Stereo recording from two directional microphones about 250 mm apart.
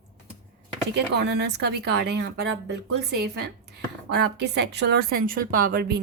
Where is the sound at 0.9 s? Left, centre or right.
Right.